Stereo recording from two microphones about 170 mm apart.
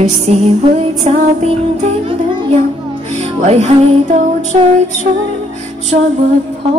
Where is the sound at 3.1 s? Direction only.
40° right (ahead or behind).